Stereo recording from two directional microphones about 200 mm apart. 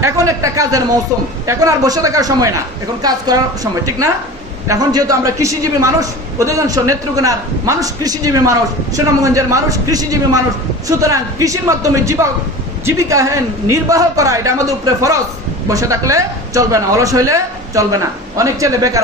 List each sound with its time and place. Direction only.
0.2 s a man's voice: 15° right (ahead or behind)
4.6 s a man's voice: 20° right (ahead or behind)